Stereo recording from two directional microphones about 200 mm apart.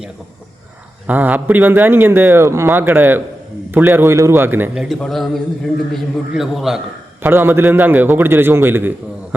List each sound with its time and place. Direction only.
1.0 s a man's voice: 10° right (ahead or behind)